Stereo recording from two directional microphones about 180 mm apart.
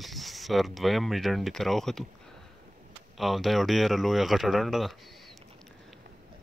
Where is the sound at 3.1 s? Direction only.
Centre (ahead or behind).